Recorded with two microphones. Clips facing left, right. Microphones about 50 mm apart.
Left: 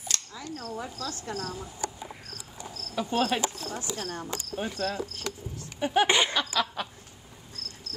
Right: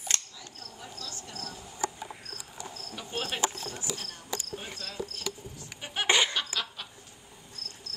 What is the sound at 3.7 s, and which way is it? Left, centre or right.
Speech, left.